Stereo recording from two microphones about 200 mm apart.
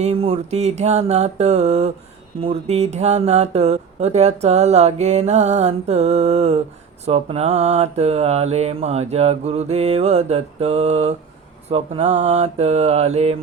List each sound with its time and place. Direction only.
0.0 s speech: 30° right (ahead or behind)